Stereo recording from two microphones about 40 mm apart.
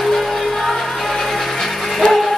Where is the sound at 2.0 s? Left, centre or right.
Centre.